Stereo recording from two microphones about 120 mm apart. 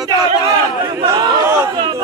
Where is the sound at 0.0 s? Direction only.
35° right (ahead or behind).